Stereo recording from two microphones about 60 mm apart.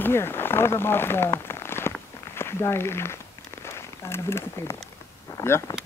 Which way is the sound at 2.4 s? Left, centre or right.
Left.